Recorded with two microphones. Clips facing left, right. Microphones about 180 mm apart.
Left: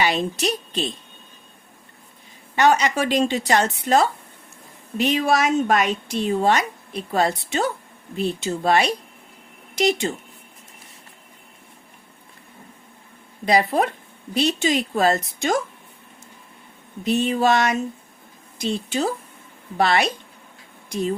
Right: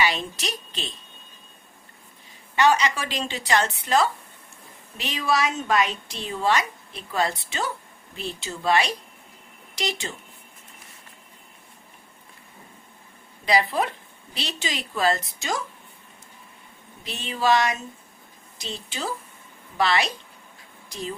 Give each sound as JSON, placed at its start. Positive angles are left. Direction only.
{"t": 0.0, "sound": "a woman's voice", "side_deg": 50}
{"t": 2.6, "sound": "a woman's voice", "side_deg": 45}
{"t": 13.4, "sound": "a woman's voice", "side_deg": 50}
{"t": 17.0, "sound": "a woman's voice", "side_deg": 45}
{"t": 18.9, "sound": "a woman's voice", "side_deg": 50}